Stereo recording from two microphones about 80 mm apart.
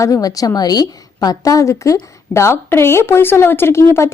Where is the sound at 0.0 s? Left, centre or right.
Left.